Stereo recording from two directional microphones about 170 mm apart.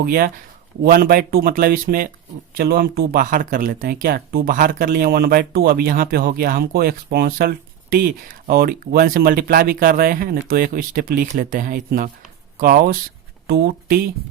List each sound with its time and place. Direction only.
0.0 s speech: 60° right (ahead or behind)